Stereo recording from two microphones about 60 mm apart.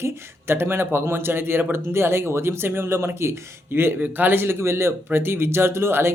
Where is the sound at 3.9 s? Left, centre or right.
Right.